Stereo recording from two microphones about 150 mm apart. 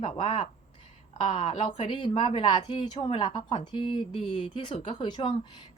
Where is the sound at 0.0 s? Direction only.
40° left (ahead or behind).